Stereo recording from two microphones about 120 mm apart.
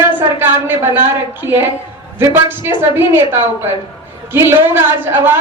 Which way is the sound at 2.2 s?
20° right (ahead or behind).